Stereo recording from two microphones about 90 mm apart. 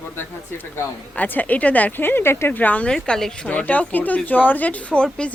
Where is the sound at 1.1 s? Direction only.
20° left (ahead or behind).